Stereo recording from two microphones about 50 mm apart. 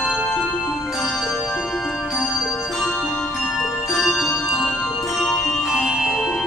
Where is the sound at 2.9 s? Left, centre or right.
Centre.